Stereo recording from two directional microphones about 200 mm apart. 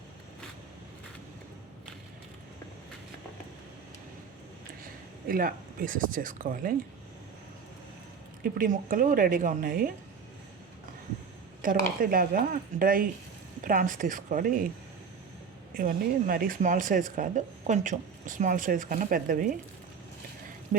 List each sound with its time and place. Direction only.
5.3 s speech: 45° right (ahead or behind)
8.4 s speech: 45° right (ahead or behind)
11.6 s speech: 45° right (ahead or behind)
15.7 s speech: 45° right (ahead or behind)